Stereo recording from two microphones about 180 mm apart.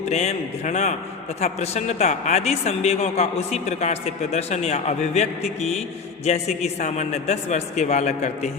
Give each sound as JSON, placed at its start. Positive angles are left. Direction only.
{"t": 0.1, "sound": "speech", "side_deg": 40}